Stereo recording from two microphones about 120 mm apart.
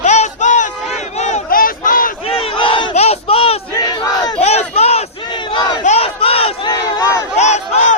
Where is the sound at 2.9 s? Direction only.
55° left (ahead or behind).